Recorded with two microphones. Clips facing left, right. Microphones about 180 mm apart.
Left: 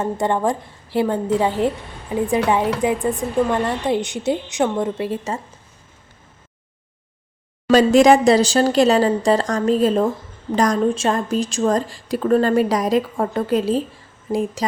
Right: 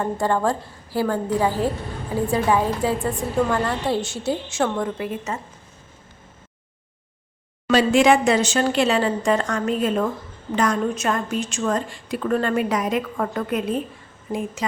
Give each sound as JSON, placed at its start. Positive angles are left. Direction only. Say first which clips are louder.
{"t": 0.0, "sound": "a woman's voice", "louder": "left 2 dB", "side_deg": 20}
{"t": 2.8, "sound": "a woman's voice", "louder": "left 3 dB", "side_deg": 20}
{"t": 7.7, "sound": "a woman's voice", "louder": "left 4 dB", "side_deg": 40}